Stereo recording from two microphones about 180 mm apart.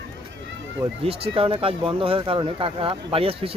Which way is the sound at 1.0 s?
30° right (ahead or behind).